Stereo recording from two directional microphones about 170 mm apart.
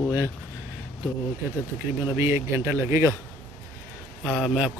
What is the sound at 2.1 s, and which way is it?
Speech, 15° right (ahead or behind).